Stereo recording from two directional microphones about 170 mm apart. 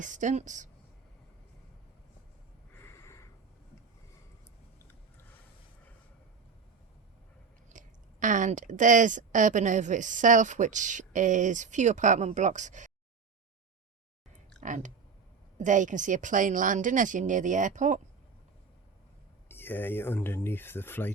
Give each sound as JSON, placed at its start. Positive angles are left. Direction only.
{"t": 0.0, "sound": "speech", "side_deg": -45}
{"t": 2.7, "sound": "a sound", "side_deg": 15}
{"t": 7.7, "sound": "speech", "side_deg": -50}
{"t": 14.6, "sound": "speech", "side_deg": -50}
{"t": 19.5, "sound": "speech", "side_deg": 10}